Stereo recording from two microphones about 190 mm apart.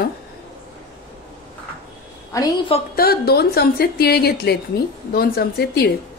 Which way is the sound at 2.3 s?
20° left (ahead or behind).